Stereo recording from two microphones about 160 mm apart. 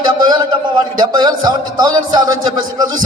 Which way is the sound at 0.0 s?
25° right (ahead or behind).